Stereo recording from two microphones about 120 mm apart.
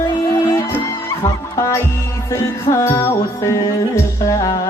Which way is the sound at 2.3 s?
25° left (ahead or behind).